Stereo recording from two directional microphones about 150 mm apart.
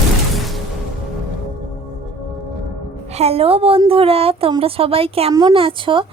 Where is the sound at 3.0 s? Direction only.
45° right (ahead or behind).